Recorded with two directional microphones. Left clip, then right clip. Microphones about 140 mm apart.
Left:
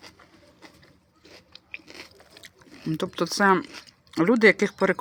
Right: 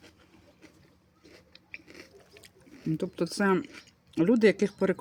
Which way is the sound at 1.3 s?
20° right (ahead or behind).